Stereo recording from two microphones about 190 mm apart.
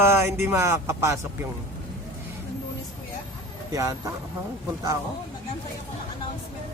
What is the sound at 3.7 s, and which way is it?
Speech, 20° right (ahead or behind).